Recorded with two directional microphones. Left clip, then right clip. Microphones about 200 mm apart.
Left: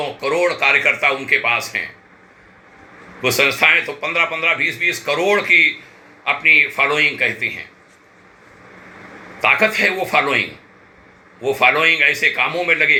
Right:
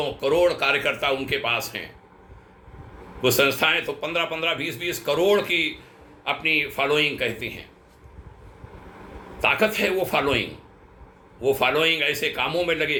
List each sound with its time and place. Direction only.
0.0 s speech: 25° right (ahead or behind)
3.2 s speech: 25° right (ahead or behind)
9.4 s speech: 25° right (ahead or behind)
11.4 s speech: 25° right (ahead or behind)